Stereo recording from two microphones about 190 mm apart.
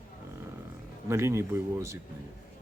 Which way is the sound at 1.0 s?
15° right (ahead or behind).